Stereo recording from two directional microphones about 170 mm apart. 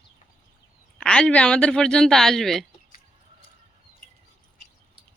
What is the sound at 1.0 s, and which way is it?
Speech, 5° left (ahead or behind).